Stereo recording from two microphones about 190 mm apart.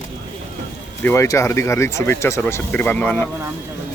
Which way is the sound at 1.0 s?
15° left (ahead or behind).